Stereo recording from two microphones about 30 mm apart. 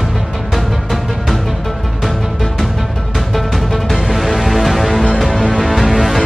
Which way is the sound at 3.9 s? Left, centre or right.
Centre.